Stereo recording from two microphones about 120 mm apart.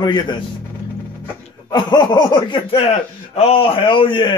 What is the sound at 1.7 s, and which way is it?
A man's voice, 35° left (ahead or behind).